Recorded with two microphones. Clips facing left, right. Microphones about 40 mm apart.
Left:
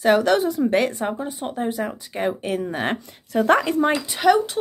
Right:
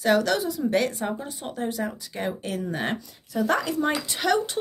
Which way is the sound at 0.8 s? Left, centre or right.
Left.